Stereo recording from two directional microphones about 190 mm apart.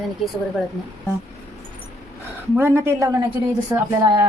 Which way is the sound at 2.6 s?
15° right (ahead or behind).